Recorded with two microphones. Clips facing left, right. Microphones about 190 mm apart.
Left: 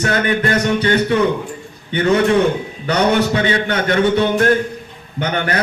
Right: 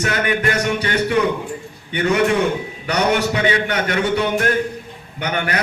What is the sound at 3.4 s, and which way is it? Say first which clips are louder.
Speech: left 1 dB; 30° left (ahead or behind).